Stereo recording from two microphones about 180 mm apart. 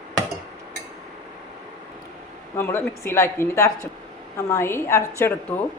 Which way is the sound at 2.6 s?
15° left (ahead or behind).